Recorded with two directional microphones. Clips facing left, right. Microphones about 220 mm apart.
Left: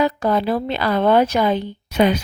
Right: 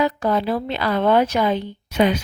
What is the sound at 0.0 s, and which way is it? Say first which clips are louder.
A woman's voice: left 2 dB; 40° left (ahead or behind).